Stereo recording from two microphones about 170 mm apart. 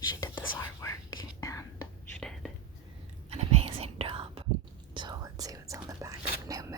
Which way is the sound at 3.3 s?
35° right (ahead or behind).